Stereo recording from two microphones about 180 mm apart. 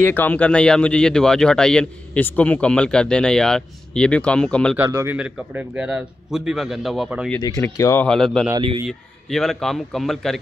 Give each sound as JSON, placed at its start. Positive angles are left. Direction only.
{"t": 0.0, "sound": "speech", "side_deg": 10}
{"t": 4.7, "sound": "speech", "side_deg": -15}
{"t": 7.4, "sound": "speech", "side_deg": 20}
{"t": 8.1, "sound": "speech", "side_deg": 5}